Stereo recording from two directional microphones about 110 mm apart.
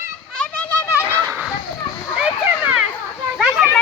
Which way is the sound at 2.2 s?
10° right (ahead or behind).